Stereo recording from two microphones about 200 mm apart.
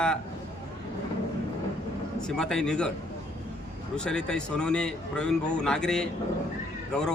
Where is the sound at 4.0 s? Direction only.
5° left (ahead or behind).